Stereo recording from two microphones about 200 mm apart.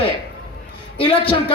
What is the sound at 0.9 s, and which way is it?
Speech, 25° left (ahead or behind).